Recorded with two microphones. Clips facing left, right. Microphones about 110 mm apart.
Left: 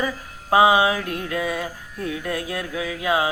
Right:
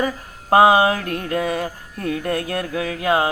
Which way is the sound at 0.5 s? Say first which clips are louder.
Right 3 dB; 55° right (ahead or behind).